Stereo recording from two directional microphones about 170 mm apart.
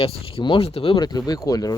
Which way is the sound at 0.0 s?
30° left (ahead or behind).